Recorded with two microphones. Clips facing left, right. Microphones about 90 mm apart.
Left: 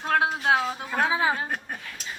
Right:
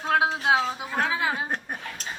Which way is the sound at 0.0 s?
10° right (ahead or behind).